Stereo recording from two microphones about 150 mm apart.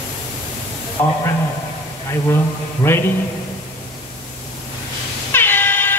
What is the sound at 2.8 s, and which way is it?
Speech, 15° left (ahead or behind).